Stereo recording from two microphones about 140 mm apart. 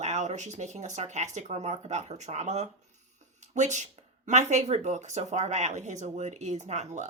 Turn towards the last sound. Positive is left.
turn(degrees=-55)  # may be behind; listen again after turning